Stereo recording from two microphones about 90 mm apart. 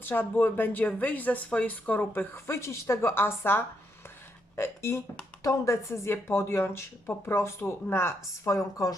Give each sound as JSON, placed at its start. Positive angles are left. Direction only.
{"t": 0.0, "sound": "speech", "side_deg": 20}